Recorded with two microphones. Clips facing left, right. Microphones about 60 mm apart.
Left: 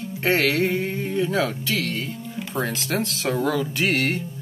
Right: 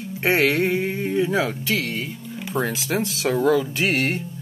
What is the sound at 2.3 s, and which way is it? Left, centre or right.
Speech, centre.